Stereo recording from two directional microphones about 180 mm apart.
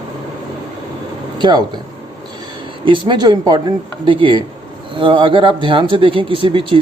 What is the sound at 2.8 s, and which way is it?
Speech, 25° right (ahead or behind).